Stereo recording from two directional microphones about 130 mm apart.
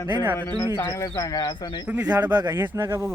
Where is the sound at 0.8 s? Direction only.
20° left (ahead or behind).